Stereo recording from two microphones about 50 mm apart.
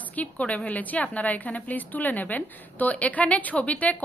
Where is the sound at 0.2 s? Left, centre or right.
Left.